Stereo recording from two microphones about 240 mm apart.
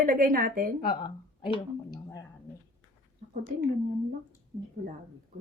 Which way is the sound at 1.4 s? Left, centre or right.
Centre.